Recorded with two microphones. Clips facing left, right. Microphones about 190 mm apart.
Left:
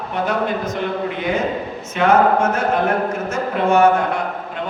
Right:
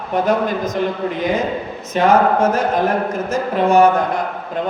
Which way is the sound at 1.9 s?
35° right (ahead or behind).